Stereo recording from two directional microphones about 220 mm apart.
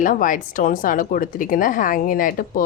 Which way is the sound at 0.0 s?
35° left (ahead or behind).